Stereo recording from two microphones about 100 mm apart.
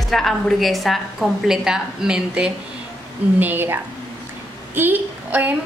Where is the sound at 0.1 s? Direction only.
Centre (ahead or behind).